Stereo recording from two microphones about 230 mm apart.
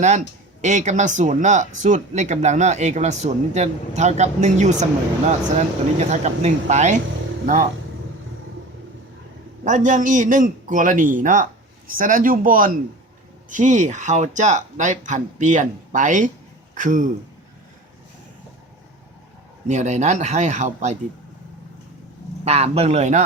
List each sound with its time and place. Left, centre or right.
0.6 s speech: right
9.6 s speech: right
19.6 s speech: right
22.4 s a man's voice: right